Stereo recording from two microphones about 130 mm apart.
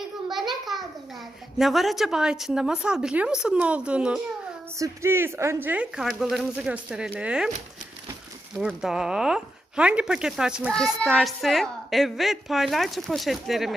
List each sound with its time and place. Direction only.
0.3 s a sound: centre (ahead or behind)
1.5 s a child's voice: centre (ahead or behind)
4.8 s a woman's voice: 20° right (ahead or behind)
8.5 s a child's voice: 5° right (ahead or behind)